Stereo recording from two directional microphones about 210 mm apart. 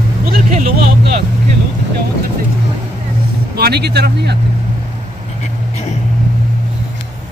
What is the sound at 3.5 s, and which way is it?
Speech, 50° right (ahead or behind).